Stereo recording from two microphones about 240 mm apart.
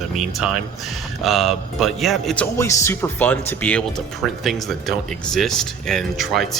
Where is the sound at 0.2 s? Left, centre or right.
Centre.